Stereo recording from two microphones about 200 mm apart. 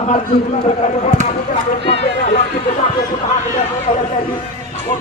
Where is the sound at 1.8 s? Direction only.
30° left (ahead or behind).